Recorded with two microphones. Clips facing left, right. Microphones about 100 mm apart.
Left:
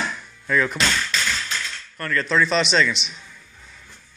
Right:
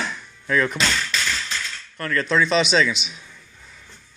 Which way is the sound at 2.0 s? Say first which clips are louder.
Even; centre (ahead or behind).